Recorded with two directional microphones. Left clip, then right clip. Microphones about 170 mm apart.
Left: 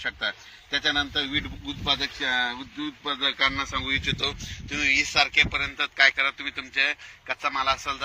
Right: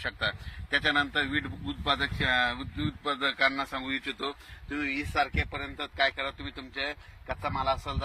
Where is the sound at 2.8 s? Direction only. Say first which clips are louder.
Left 4 dB; 60° right (ahead or behind).